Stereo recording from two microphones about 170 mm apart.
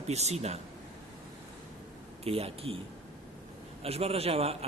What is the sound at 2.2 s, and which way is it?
Speech, 35° right (ahead or behind).